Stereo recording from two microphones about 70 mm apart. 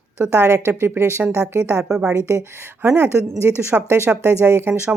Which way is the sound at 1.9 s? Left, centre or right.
Centre.